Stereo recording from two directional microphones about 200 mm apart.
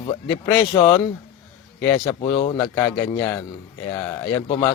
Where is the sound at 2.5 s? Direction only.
10° left (ahead or behind).